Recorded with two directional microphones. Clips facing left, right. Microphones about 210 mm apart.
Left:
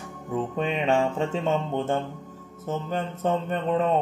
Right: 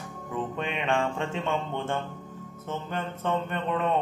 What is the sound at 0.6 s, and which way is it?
Music, 40° left (ahead or behind).